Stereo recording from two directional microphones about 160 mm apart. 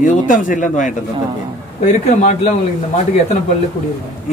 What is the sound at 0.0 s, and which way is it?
Speech, 55° left (ahead or behind).